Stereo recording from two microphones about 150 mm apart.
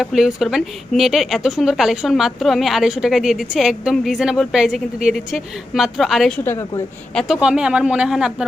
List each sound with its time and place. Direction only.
0.0 s a woman's voice: centre (ahead or behind)
6.4 s a woman's voice: 15° left (ahead or behind)
7.1 s a woman's voice: centre (ahead or behind)